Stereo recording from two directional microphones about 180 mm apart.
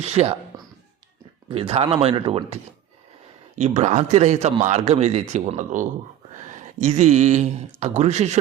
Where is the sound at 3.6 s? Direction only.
40° right (ahead or behind).